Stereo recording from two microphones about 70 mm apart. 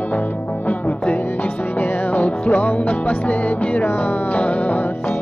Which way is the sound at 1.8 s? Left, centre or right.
Left.